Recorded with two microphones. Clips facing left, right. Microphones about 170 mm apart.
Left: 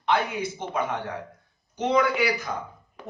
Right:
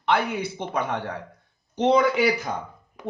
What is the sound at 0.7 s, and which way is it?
A man's voice, 60° right (ahead or behind).